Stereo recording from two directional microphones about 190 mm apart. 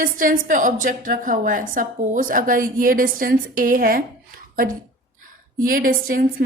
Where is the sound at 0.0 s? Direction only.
45° right (ahead or behind).